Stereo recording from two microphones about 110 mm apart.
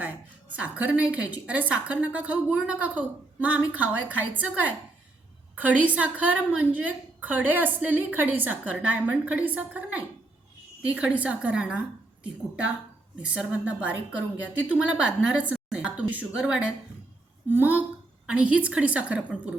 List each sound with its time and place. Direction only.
0.5 s a woman's voice: 15° right (ahead or behind)
13.2 s a woman's voice: 10° right (ahead or behind)